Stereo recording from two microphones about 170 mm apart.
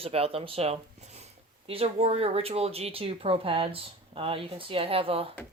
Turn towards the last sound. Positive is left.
turn(degrees=-35)  # may be behind; listen again after turning